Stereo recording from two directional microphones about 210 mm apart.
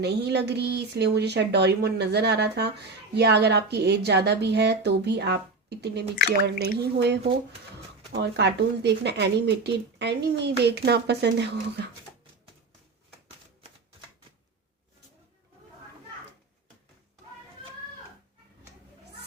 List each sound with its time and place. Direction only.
0.0 s speech: 50° right (ahead or behind)
8.2 s speech: 55° right (ahead or behind)